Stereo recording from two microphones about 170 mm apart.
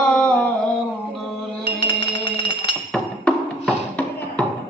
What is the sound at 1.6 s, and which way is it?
Music, 30° left (ahead or behind).